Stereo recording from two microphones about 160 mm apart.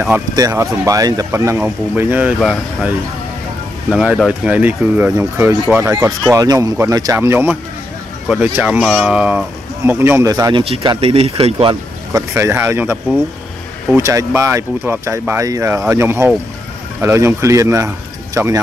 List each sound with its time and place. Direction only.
0.4 s speech: 20° right (ahead or behind)
3.9 s speech: 5° right (ahead or behind)
6.3 s speech: 20° right (ahead or behind)
10.5 s speech: 35° right (ahead or behind)
12.1 s speech: 20° right (ahead or behind)